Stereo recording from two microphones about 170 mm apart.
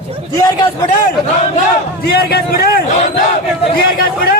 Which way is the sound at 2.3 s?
70° left (ahead or behind).